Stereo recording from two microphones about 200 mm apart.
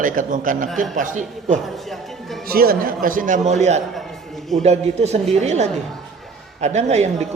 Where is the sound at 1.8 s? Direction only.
Centre (ahead or behind).